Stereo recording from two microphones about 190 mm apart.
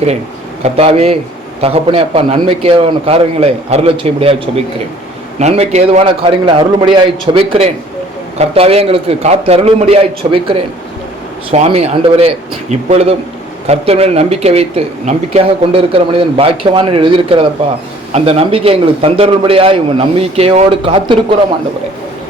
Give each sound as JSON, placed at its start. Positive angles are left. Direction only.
{"t": 0.6, "sound": "a man's voice", "side_deg": -35}
{"t": 11.5, "sound": "a man's voice", "side_deg": -35}